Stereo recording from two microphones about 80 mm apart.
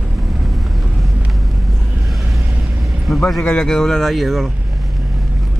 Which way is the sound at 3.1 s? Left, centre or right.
Centre.